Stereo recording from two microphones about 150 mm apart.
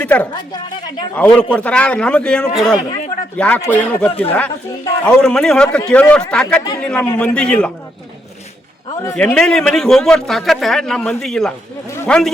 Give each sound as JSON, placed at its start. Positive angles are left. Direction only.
{"t": 0.0, "sound": "a man's voice", "side_deg": 10}
{"t": 9.1, "sound": "a man's voice", "side_deg": 5}
{"t": 11.9, "sound": "a sound", "side_deg": 15}